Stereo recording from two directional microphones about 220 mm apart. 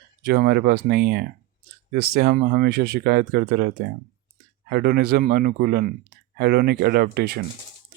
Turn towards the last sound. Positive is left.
turn(degrees=-45)  # may be behind; listen again after turning